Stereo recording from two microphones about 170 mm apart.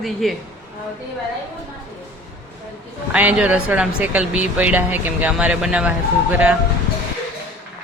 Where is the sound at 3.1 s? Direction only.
10° right (ahead or behind).